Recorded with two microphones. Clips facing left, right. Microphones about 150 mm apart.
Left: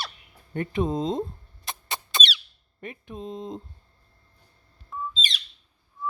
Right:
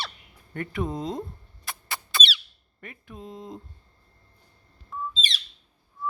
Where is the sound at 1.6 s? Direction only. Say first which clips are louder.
Left 2 dB; 20° left (ahead or behind).